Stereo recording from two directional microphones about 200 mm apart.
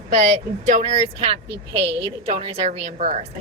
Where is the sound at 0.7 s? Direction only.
30° right (ahead or behind).